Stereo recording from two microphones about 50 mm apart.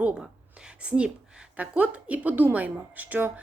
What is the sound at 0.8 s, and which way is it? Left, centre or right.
A woman's voice, right.